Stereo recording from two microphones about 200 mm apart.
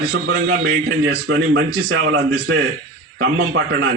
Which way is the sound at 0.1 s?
90° right.